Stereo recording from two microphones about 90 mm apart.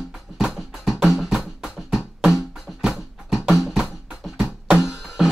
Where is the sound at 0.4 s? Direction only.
5° right (ahead or behind).